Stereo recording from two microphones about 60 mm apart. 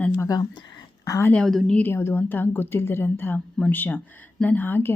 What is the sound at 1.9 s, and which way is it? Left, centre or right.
Speech, left.